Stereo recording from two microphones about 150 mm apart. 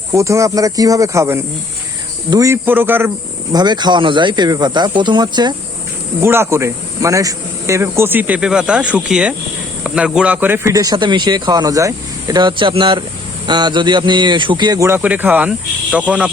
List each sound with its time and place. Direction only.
0.1 s speech: 20° right (ahead or behind)
3.5 s speech: 30° right (ahead or behind)
6.1 s speech: 15° right (ahead or behind)